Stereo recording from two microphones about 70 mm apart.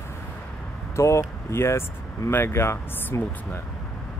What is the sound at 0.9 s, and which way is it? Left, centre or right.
Speech, left.